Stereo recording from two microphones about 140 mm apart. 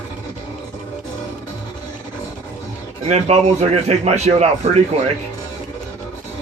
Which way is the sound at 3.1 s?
50° right (ahead or behind).